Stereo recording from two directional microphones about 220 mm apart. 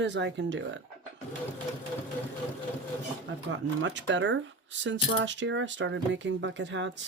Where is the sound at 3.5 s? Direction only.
55° right (ahead or behind).